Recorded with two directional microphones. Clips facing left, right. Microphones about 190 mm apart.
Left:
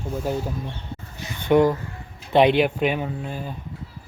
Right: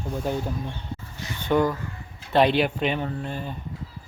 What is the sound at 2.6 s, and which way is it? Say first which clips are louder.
Speech: left 3 dB; 10° left (ahead or behind).